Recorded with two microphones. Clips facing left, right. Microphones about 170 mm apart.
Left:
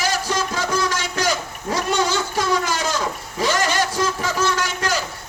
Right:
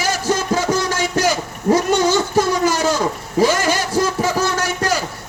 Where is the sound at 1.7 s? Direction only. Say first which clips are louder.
Right 6 dB; 40° right (ahead or behind).